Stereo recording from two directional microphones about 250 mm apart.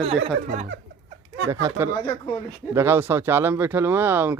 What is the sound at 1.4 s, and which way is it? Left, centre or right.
Speech, centre.